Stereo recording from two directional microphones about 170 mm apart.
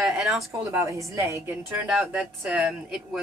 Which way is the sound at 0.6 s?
15° right (ahead or behind).